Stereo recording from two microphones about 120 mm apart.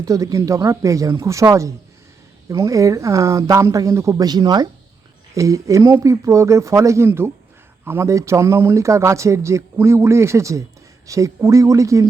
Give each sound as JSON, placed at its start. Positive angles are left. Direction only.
{"t": 0.0, "sound": "speech", "side_deg": -30}